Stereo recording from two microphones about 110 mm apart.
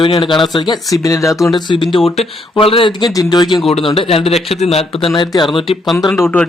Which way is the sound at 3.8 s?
55° left (ahead or behind).